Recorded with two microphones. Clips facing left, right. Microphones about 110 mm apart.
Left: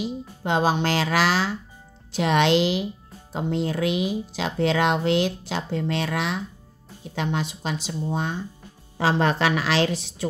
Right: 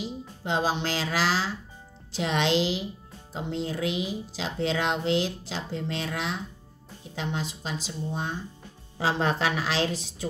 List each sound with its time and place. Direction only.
0.0 s a woman's voice: 60° left (ahead or behind)